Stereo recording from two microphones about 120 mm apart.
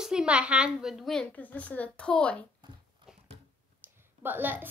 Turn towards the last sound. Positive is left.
turn(degrees=-15)  # may be behind; listen again after turning